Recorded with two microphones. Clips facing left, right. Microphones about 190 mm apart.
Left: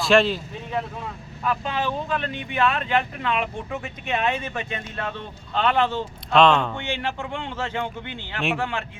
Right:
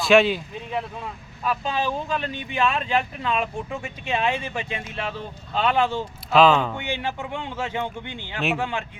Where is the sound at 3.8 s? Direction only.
15° right (ahead or behind).